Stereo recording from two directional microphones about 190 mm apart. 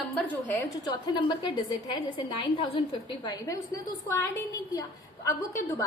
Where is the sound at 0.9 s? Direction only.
25° left (ahead or behind).